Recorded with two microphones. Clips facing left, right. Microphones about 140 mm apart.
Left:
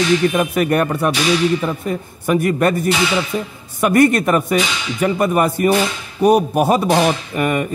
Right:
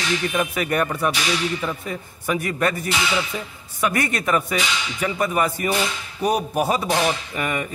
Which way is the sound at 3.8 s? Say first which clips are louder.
Left 10 dB; 50° left (ahead or behind).